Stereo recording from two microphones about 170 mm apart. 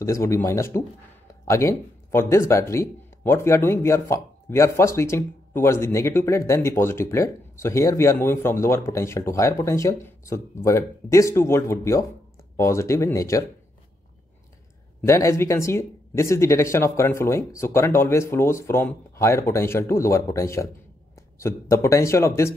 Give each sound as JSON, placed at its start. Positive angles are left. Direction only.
{"t": 0.0, "sound": "speech", "side_deg": 15}
{"t": 15.0, "sound": "speech", "side_deg": 20}